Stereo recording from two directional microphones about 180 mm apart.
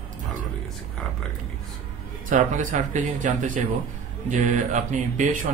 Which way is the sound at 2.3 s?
45° right (ahead or behind).